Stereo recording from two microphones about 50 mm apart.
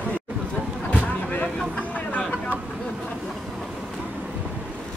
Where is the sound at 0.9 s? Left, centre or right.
Left.